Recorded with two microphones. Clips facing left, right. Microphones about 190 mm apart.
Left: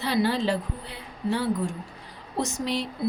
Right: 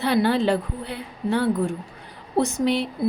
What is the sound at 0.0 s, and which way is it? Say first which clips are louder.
A woman's voice: right 4 dB; 55° right (ahead or behind).